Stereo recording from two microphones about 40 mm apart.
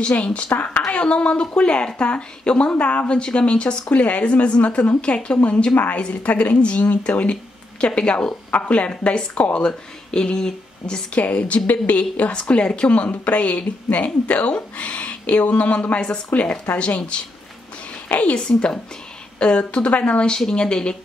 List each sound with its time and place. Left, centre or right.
0.0 s a woman's voice: left
3.9 s a woman's voice: left
8.5 s a woman's voice: left
9.6 s speech: left
11.1 s a woman's voice: left
16.3 s speech: left
16.7 s a woman's voice: left
18.0 s a woman's voice: left
19.3 s a woman's voice: left